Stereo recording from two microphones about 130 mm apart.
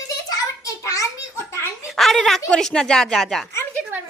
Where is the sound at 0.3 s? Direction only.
25° left (ahead or behind).